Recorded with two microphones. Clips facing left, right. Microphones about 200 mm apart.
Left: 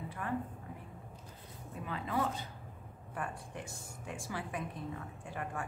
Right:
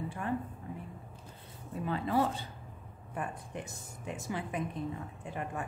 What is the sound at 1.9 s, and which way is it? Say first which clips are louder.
A woman's voice: right 5 dB; 30° right (ahead or behind).